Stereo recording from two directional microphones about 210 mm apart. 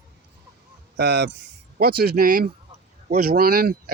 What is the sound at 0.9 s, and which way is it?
Speech, 50° right (ahead or behind).